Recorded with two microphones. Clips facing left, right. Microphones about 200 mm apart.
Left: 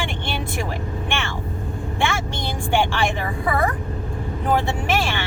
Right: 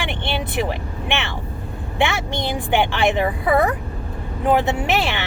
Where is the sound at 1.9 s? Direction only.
20° right (ahead or behind).